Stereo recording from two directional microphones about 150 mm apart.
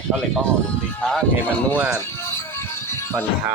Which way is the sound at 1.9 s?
15° left (ahead or behind).